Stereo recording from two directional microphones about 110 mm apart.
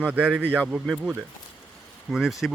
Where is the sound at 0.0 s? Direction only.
10° right (ahead or behind).